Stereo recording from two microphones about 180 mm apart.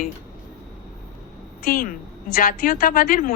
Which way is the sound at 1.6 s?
55° left (ahead or behind).